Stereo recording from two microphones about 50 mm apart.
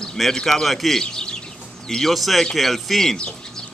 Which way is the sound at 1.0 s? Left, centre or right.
Centre.